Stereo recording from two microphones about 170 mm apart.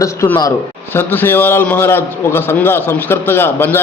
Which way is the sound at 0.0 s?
20° left (ahead or behind).